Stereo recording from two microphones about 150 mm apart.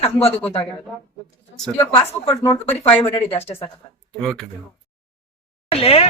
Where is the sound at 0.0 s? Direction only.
40° left (ahead or behind).